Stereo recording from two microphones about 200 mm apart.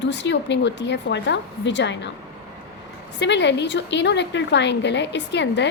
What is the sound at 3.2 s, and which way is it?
A woman's voice, 60° left (ahead or behind).